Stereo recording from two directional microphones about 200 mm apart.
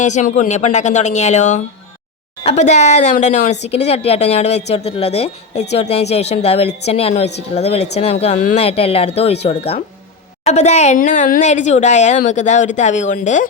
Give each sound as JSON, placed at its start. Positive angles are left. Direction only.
{"t": 0.0, "sound": "speech", "side_deg": 35}